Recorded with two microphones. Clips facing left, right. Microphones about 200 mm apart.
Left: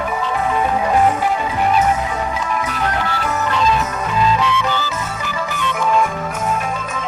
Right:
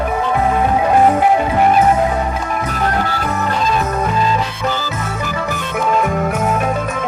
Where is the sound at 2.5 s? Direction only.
45° right (ahead or behind).